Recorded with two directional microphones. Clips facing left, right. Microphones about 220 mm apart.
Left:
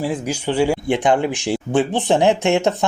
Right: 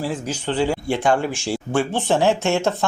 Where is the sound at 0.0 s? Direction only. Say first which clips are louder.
Left 3 dB; 15° left (ahead or behind).